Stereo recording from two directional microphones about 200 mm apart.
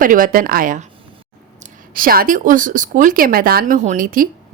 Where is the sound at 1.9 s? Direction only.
45° right (ahead or behind).